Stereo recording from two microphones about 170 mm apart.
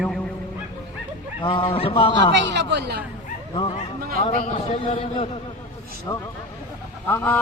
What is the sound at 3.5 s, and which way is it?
Speech, 30° left (ahead or behind).